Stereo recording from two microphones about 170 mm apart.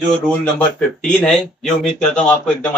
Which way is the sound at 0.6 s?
5° left (ahead or behind).